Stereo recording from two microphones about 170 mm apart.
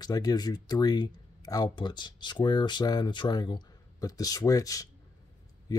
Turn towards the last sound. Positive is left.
turn(degrees=20)  # may be behind; listen again after turning